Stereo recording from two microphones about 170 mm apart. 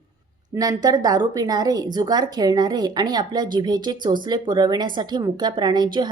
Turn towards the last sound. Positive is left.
turn(degrees=-25)  # may be behind; listen again after turning